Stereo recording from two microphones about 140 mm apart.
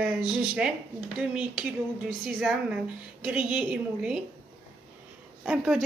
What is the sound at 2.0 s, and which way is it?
A woman's voice, centre (ahead or behind).